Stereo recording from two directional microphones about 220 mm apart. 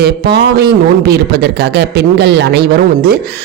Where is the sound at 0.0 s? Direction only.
45° right (ahead or behind).